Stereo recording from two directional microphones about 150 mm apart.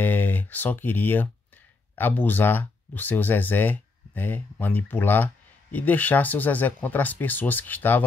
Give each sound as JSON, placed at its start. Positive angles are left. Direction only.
{"t": 0.0, "sound": "speech", "side_deg": 15}